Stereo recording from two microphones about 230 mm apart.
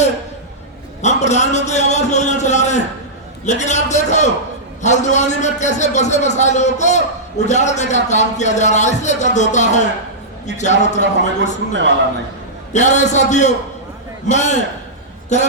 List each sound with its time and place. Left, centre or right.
1.0 s a sound: left
3.4 s a man's voice: left
12.7 s a man's voice: left